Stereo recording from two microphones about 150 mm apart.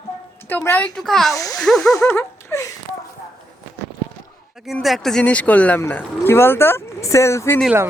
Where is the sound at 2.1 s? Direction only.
20° left (ahead or behind).